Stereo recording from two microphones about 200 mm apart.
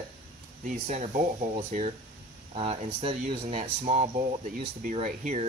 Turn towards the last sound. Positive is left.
turn(degrees=-35)  # may be behind; listen again after turning